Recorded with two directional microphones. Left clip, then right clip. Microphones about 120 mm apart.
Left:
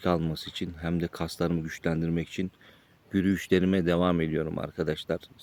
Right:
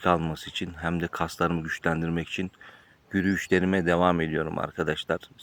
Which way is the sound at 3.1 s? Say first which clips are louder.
Right 1 dB; 40° left (ahead or behind).